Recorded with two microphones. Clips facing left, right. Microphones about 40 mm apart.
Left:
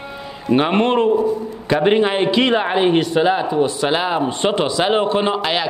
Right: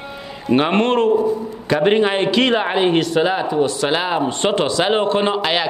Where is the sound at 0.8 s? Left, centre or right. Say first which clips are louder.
Even; centre.